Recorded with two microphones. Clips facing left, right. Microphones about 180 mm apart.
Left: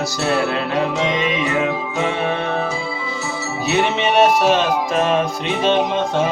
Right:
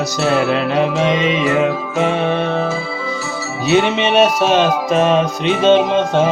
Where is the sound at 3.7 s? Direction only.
20° right (ahead or behind).